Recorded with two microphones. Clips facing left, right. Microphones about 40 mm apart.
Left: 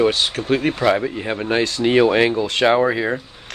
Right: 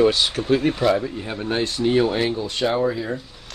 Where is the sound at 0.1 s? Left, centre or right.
Left.